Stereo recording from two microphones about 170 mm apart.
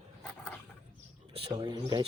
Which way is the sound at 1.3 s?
25° right (ahead or behind).